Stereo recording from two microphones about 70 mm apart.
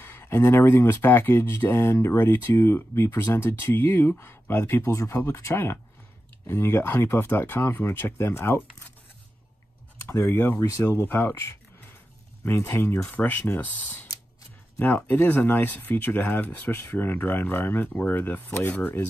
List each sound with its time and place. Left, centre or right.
0.0 s a sound: left
0.4 s speech: left
4.8 s speech: left
9.9 s speech: left